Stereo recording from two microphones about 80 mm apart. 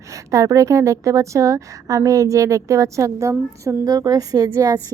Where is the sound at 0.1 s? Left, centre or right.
Right.